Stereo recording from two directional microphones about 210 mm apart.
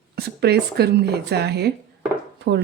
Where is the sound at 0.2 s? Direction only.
50° right (ahead or behind).